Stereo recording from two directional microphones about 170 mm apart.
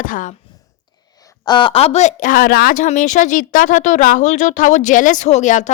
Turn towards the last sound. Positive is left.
turn(degrees=45)  # may be behind; listen again after turning